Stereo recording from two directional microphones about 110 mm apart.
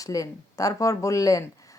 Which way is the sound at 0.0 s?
30° left (ahead or behind).